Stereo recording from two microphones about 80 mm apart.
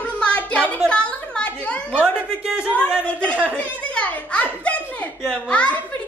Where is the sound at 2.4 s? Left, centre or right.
Centre.